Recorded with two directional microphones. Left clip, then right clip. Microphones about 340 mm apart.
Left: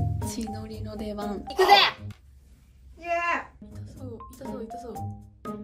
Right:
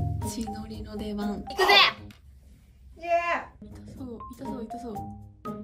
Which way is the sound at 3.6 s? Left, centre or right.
Centre.